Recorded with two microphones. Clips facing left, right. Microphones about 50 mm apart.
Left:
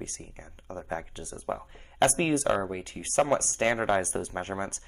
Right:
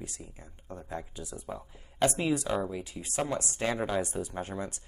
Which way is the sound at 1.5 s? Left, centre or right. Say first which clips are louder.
Left 7 dB; left.